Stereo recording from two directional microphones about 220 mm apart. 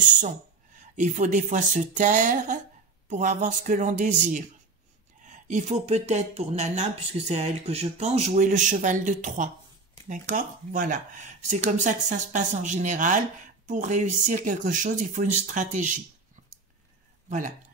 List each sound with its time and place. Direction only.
0.7 s speech: 35° right (ahead or behind)
17.3 s speech: 35° right (ahead or behind)